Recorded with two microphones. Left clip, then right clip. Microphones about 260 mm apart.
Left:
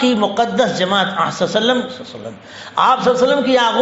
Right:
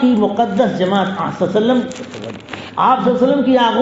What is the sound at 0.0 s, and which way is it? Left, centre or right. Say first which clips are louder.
A man's voice: even; left.